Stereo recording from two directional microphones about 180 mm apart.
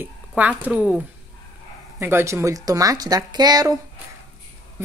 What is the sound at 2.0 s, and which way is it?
Speech, 15° right (ahead or behind).